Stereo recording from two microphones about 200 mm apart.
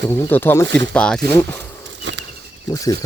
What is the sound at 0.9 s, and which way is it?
Speech, 5° left (ahead or behind).